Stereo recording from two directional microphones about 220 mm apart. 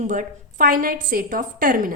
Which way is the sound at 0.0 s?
35° right (ahead or behind).